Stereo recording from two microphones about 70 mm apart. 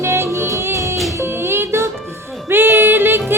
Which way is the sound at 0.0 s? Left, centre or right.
Right.